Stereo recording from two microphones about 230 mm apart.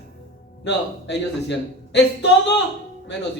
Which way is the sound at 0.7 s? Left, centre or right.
Left.